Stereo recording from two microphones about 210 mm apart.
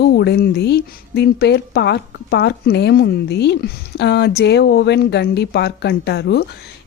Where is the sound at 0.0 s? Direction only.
55° left (ahead or behind).